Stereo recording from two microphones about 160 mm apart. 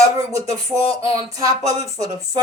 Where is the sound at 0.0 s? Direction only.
20° right (ahead or behind).